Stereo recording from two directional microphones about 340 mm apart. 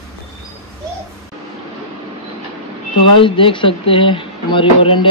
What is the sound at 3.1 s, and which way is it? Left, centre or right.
Speech, centre.